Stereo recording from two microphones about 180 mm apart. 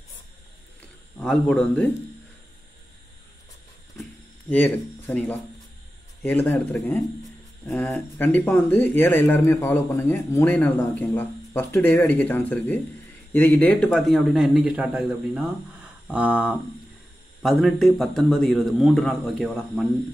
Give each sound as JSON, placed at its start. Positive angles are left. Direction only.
{"t": 1.1, "sound": "speech", "side_deg": 5}
{"t": 4.0, "sound": "a sound", "side_deg": 5}
{"t": 6.2, "sound": "a man's voice", "side_deg": 10}